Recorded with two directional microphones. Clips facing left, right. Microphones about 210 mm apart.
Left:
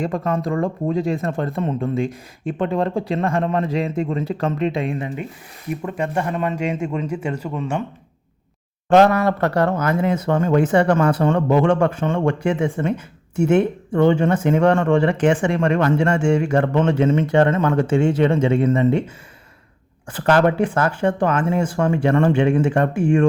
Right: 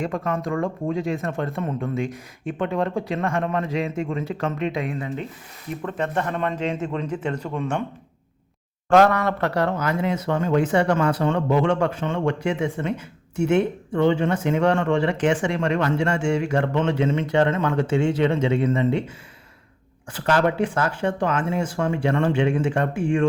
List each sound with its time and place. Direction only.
0.0 s speech: 35° left (ahead or behind)
5.8 s a man's voice: 10° left (ahead or behind)
8.9 s speech: 25° left (ahead or behind)
9.4 s speech: 45° left (ahead or behind)
20.1 s speech: 55° left (ahead or behind)